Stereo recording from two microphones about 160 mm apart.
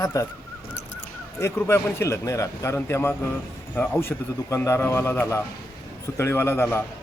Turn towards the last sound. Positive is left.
turn(degrees=15)  # may be behind; listen again after turning